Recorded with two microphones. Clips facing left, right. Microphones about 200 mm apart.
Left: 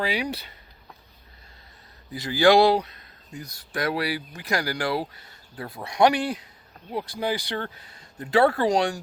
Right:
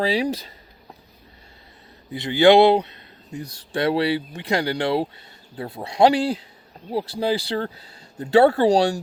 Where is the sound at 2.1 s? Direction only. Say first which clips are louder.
Right 4 dB; 25° right (ahead or behind).